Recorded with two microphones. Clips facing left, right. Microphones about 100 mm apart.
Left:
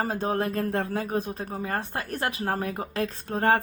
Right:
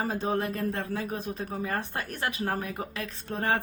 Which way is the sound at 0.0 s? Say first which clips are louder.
Left 2 dB; 45° left (ahead or behind).